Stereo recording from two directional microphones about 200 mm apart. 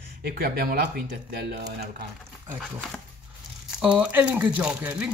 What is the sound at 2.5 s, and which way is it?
A man's voice, 5° right (ahead or behind).